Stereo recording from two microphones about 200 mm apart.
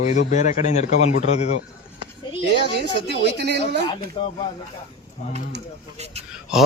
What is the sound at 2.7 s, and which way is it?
Speech, 55° right (ahead or behind).